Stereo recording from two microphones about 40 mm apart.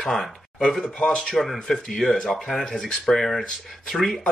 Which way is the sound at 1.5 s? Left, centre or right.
Centre.